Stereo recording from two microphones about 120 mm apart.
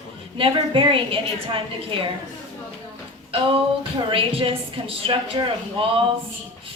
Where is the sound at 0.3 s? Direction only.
45° right (ahead or behind).